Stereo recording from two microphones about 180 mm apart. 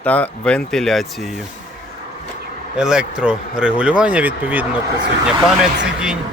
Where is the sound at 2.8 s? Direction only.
5° right (ahead or behind).